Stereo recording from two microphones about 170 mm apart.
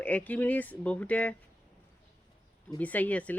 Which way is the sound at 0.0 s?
10° left (ahead or behind).